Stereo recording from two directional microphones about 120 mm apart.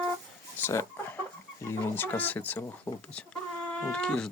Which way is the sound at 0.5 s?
20° left (ahead or behind).